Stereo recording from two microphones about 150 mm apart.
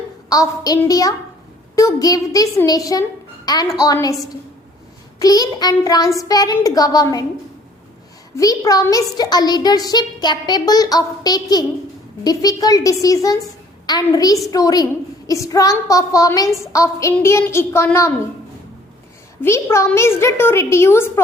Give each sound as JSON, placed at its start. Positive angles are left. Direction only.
{"t": 0.3, "sound": "a child's voice", "side_deg": 25}
{"t": 5.2, "sound": "a child's voice", "side_deg": 25}
{"t": 8.4, "sound": "a child's voice", "side_deg": 25}
{"t": 19.4, "sound": "a woman's voice", "side_deg": 15}